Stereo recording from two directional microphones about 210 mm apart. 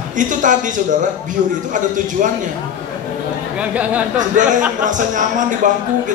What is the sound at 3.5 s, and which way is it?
Speech, 5° right (ahead or behind).